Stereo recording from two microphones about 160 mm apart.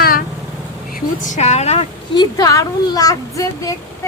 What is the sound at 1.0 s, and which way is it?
Speech, 50° left (ahead or behind).